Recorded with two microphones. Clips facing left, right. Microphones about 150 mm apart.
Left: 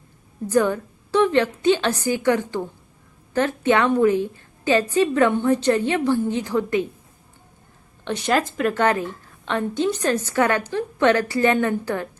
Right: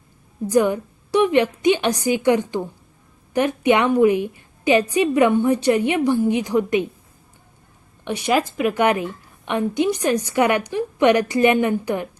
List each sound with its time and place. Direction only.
0.4 s a woman's voice: 15° right (ahead or behind)
8.0 s a woman's voice: 10° right (ahead or behind)